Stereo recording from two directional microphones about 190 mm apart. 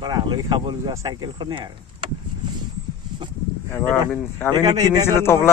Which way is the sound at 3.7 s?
10° left (ahead or behind).